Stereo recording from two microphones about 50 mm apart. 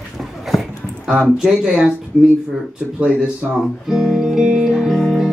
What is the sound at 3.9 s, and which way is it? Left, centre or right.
Speech, centre.